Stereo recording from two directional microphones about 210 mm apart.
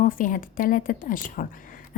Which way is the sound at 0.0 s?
40° left (ahead or behind).